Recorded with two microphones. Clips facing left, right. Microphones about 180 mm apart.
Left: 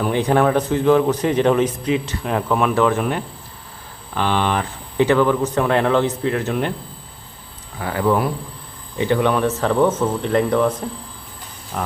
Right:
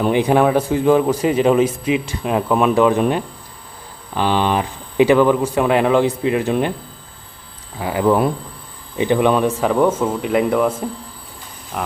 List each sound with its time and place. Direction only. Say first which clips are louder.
0.0 s a man's voice: right 2 dB; 15° right (ahead or behind)
7.8 s a man's voice: right 3 dB; 15° right (ahead or behind)